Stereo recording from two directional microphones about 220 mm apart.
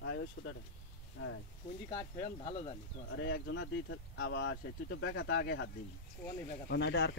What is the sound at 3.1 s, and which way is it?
Speech, 55° left (ahead or behind).